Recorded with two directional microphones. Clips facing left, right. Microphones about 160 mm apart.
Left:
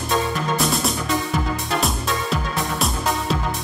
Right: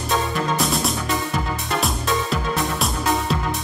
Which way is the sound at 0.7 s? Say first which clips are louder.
Left 1 dB; centre (ahead or behind).